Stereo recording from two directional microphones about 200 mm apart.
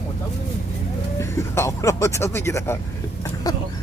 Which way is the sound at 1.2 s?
15° left (ahead or behind).